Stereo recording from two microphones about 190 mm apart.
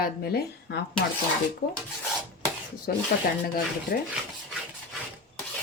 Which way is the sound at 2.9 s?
55° left (ahead or behind).